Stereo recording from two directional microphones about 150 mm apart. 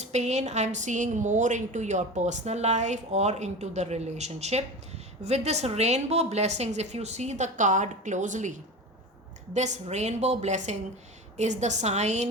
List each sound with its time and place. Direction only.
0.0 s a woman's voice: 50° right (ahead or behind)